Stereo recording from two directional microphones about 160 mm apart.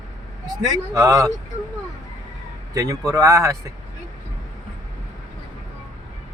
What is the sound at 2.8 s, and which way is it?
Speech, 20° right (ahead or behind).